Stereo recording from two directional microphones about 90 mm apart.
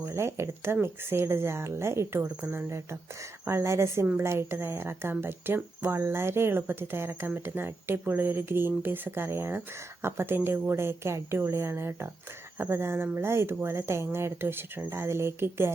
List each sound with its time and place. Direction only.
0.0 s speech: 30° right (ahead or behind)
2.6 s speech: 30° right (ahead or behind)